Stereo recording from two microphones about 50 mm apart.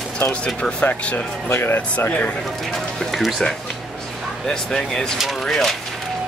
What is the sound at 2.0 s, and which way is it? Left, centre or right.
Speech, left.